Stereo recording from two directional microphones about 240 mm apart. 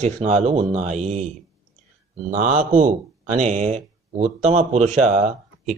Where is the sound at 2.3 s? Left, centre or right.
Right.